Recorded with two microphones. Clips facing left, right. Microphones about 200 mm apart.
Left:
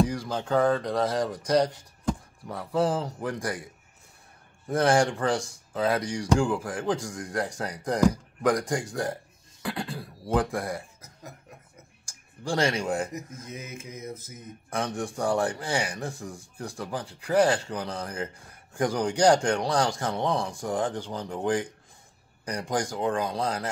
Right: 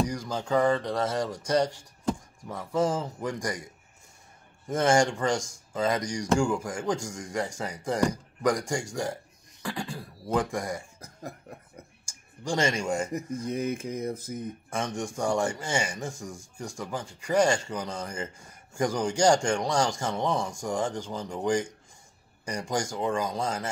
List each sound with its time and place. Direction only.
0.0 s speech: centre (ahead or behind)
2.4 s speech: centre (ahead or behind)
4.6 s speech: centre (ahead or behind)
12.1 s speech: centre (ahead or behind)
13.5 s speech: 55° right (ahead or behind)
15.1 s speech: centre (ahead or behind)